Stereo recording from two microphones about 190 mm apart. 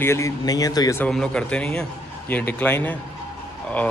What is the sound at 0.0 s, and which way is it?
Speech, 15° left (ahead or behind).